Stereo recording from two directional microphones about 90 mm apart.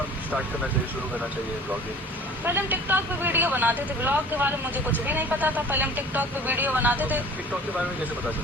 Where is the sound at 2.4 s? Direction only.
25° right (ahead or behind).